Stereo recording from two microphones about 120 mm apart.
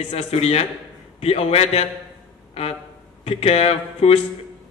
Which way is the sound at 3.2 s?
60° left (ahead or behind).